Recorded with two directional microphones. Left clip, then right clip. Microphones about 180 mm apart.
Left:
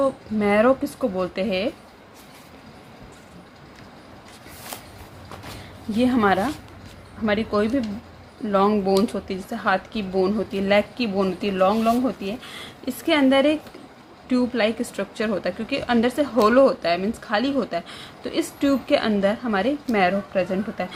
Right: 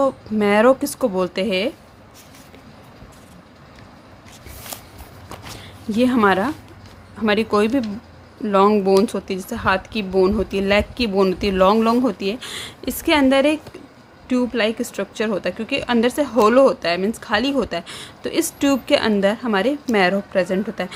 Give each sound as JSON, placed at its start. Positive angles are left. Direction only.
{"t": 0.0, "sound": "a woman's voice", "side_deg": -35}
{"t": 5.9, "sound": "a woman's voice", "side_deg": -30}